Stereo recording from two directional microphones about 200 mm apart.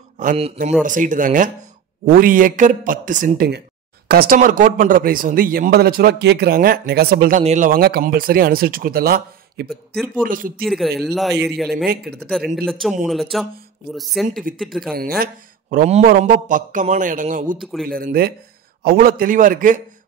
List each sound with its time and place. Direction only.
0.2 s a man's voice: 40° right (ahead or behind)
10.6 s speech: centre (ahead or behind)
11.7 s a man's voice: 50° right (ahead or behind)
12.3 s speech: centre (ahead or behind)
15.0 s speech: 50° right (ahead or behind)
17.6 s speech: centre (ahead or behind)
17.8 s a man's voice: 45° right (ahead or behind)